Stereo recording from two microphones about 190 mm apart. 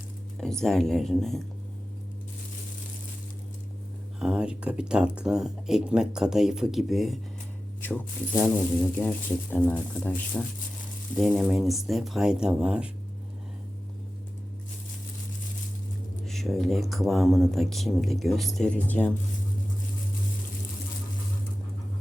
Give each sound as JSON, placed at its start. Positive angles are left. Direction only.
{"t": 0.3, "sound": "speech", "side_deg": 0}
{"t": 4.2, "sound": "speech", "side_deg": -5}
{"t": 7.8, "sound": "speech", "side_deg": 10}
{"t": 16.2, "sound": "speech", "side_deg": 0}